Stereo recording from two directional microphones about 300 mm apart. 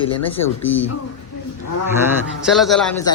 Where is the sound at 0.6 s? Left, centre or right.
Left.